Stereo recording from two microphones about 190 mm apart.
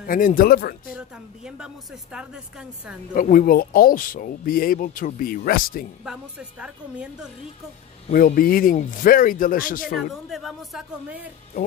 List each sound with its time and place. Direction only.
0.0 s speech: 45° left (ahead or behind)
0.8 s speech: 5° right (ahead or behind)
3.2 s speech: 50° left (ahead or behind)
6.0 s a woman's voice: 5° right (ahead or behind)
8.1 s speech: 50° left (ahead or behind)
9.9 s a woman's voice: centre (ahead or behind)